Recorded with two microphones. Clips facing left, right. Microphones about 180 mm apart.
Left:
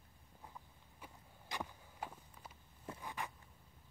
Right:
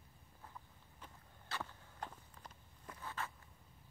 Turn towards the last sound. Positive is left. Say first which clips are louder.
# even
turn(degrees=15)  # may be behind; listen again after turning